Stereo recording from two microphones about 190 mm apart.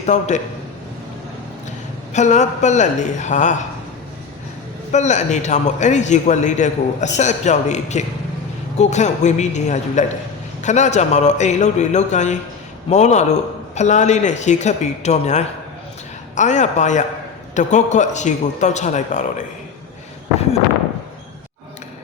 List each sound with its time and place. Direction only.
0.0 s a man's voice: 40° left (ahead or behind)
2.1 s a man's voice: 40° left (ahead or behind)
4.9 s a man's voice: 40° left (ahead or behind)